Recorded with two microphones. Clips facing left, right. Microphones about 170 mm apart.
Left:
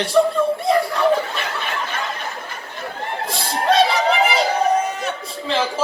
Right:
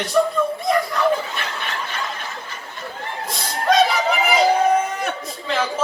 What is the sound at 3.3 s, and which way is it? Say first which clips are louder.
Chuckle: even; 30° left (ahead or behind).